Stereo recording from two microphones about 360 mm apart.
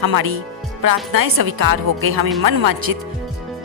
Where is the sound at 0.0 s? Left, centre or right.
Right.